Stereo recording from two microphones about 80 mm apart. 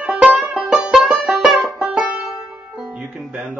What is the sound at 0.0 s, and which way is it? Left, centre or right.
Music, centre.